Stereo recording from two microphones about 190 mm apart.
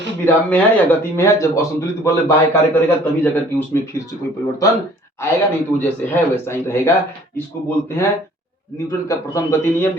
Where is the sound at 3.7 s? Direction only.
15° left (ahead or behind).